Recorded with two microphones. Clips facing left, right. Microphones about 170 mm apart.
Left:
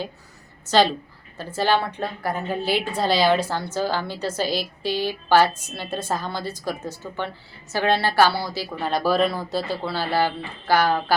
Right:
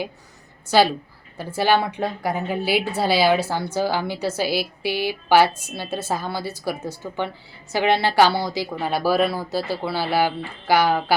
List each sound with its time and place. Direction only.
0.6 s a woman's voice: 10° right (ahead or behind)
8.8 s a woman's voice: 5° right (ahead or behind)